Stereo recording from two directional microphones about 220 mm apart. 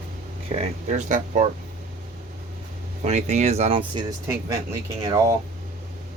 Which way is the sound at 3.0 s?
30° right (ahead or behind).